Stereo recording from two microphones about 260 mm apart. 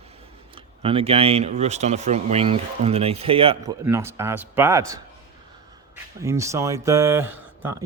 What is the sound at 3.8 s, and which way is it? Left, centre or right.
Speech, centre.